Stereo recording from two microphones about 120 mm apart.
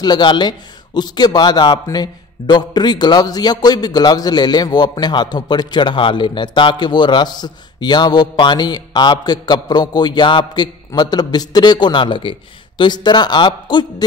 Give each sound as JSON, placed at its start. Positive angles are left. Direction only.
{"t": 0.0, "sound": "a man's voice", "side_deg": 35}